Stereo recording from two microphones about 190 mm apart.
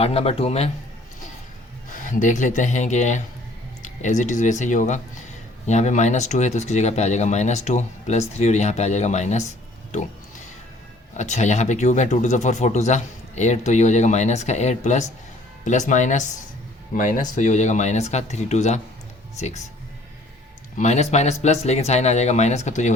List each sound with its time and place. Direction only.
0.0 s speech: 30° left (ahead or behind)
2.0 s speech: 45° left (ahead or behind)
11.2 s speech: 40° left (ahead or behind)
20.7 s speech: 35° left (ahead or behind)